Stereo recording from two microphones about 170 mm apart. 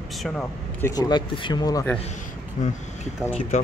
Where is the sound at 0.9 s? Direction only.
25° left (ahead or behind).